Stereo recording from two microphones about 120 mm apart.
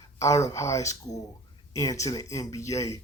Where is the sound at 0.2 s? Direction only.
25° left (ahead or behind).